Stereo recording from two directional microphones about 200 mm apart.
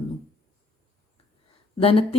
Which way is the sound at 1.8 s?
30° left (ahead or behind).